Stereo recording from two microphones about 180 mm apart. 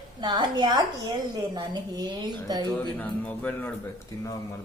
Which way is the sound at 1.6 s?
20° right (ahead or behind).